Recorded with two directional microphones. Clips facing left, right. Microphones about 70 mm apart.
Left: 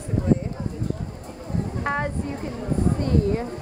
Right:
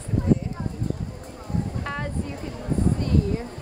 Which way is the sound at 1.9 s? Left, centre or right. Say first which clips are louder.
Left 5 dB; left.